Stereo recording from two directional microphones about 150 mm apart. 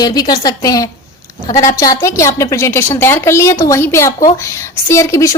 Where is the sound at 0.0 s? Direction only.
25° left (ahead or behind).